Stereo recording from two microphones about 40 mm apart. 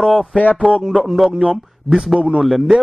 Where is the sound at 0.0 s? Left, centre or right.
Centre.